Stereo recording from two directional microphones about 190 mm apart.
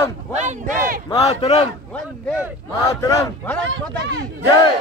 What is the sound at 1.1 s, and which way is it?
Speech, 30° left (ahead or behind).